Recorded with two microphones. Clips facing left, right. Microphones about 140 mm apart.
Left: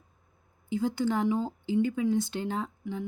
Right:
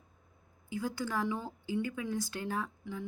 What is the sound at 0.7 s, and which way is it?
Speech, 25° left (ahead or behind).